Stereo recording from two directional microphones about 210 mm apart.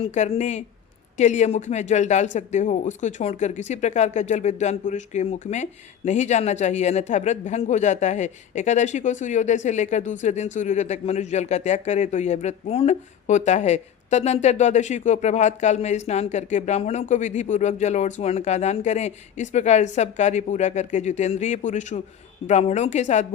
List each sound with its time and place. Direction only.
0.0 s speech: 30° left (ahead or behind)